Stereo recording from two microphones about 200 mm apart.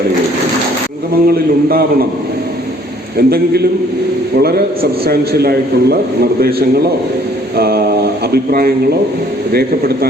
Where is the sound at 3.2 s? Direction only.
50° right (ahead or behind).